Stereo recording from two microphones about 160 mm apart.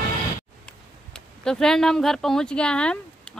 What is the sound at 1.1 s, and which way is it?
Speech, 5° left (ahead or behind).